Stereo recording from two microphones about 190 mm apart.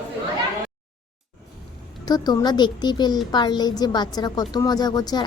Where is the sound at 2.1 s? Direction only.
20° left (ahead or behind).